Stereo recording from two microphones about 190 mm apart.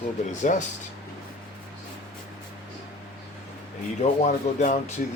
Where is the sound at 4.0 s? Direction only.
45° left (ahead or behind).